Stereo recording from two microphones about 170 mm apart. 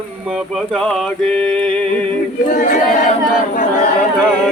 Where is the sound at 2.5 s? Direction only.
50° left (ahead or behind).